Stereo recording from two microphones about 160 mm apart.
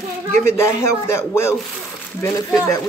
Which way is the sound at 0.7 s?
20° left (ahead or behind).